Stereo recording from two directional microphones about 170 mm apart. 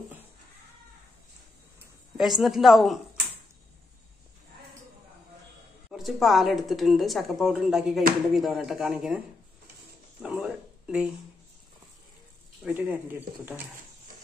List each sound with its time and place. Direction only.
2.1 s a woman's voice: centre (ahead or behind)
5.9 s a woman's voice: centre (ahead or behind)
10.2 s a sound: 5° right (ahead or behind)
12.6 s speech: 10° right (ahead or behind)